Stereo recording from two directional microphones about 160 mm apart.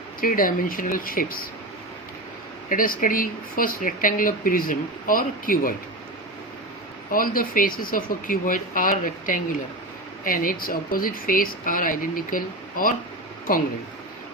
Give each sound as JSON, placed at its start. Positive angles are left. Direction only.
{"t": 0.2, "sound": "speech", "side_deg": 60}
{"t": 2.6, "sound": "speech", "side_deg": 60}
{"t": 7.1, "sound": "speech", "side_deg": 60}